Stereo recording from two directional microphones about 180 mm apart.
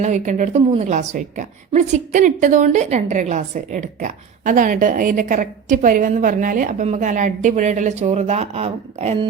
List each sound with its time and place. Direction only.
0.0 s a woman's voice: 45° right (ahead or behind)